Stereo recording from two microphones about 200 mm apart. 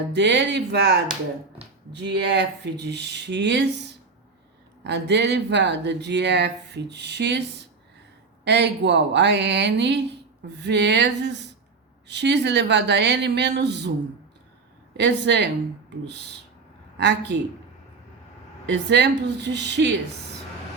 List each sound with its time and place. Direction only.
0.1 s speech: 60° right (ahead or behind)
14.9 s speech: 60° right (ahead or behind)
17.0 s speech: 60° right (ahead or behind)
18.6 s speech: 60° right (ahead or behind)